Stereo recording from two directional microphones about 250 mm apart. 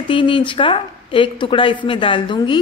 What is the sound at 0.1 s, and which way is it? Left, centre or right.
A woman's voice, centre.